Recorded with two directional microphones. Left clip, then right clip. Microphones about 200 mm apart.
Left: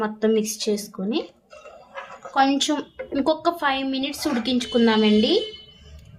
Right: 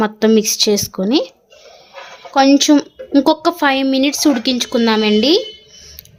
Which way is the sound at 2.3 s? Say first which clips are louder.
Right 9 dB; 40° right (ahead or behind).